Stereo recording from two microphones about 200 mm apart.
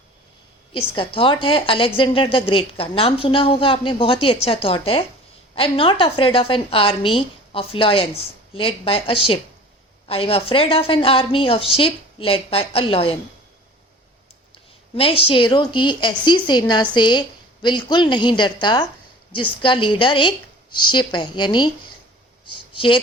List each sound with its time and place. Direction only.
0.7 s a woman's voice: 25° left (ahead or behind)
14.9 s a woman's voice: 25° left (ahead or behind)
22.4 s a sound: 25° left (ahead or behind)